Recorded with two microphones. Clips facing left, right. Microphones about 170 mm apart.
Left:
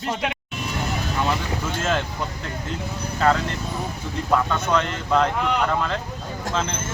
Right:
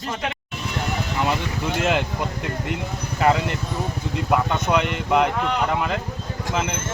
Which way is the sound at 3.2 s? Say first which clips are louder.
Right 1 dB; 15° right (ahead or behind).